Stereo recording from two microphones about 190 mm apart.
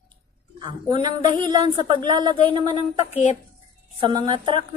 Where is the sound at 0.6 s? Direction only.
25° right (ahead or behind).